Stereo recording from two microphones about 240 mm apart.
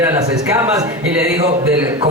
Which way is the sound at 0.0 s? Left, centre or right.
Centre.